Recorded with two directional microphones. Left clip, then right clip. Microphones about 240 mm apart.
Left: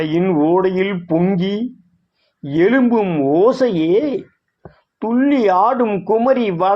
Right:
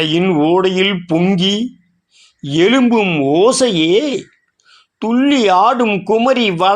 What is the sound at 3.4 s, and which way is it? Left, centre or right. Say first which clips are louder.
Speech: right 2 dB; right.